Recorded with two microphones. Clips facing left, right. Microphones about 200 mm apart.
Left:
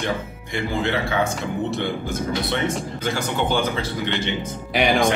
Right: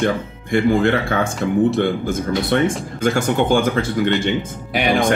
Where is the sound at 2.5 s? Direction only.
50° right (ahead or behind).